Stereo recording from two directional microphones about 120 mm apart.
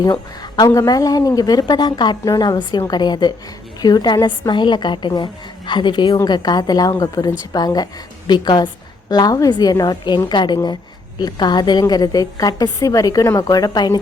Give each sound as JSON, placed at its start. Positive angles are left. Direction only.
{"t": 0.0, "sound": "a woman's voice", "side_deg": 35}